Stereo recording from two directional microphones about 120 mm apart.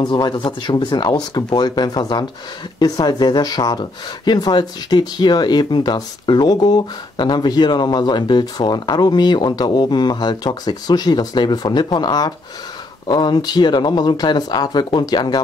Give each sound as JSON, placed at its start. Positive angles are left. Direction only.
{"t": 0.0, "sound": "speech", "side_deg": 40}